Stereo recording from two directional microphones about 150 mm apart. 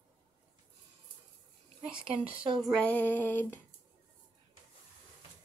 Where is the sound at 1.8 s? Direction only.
5° right (ahead or behind).